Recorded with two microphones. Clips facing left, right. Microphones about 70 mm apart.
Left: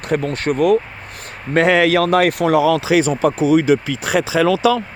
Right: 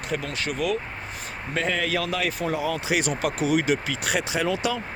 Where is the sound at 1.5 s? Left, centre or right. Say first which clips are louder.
Left 12 dB; left.